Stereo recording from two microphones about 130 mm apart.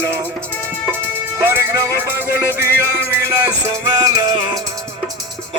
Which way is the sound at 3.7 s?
30° right (ahead or behind).